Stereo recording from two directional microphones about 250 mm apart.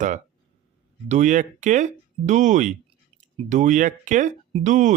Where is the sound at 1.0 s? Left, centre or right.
Right.